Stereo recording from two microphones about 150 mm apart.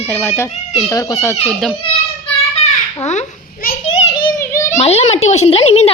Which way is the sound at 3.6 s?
75° left (ahead or behind).